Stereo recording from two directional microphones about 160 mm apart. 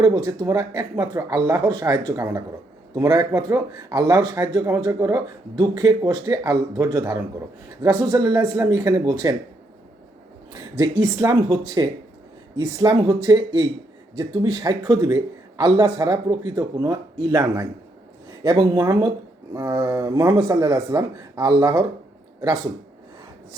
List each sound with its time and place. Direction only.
0.0 s speech: 20° right (ahead or behind)
10.5 s speech: 20° right (ahead or behind)